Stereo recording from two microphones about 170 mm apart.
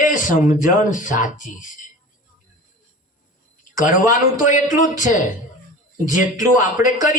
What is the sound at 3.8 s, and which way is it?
Speech, 50° left (ahead or behind).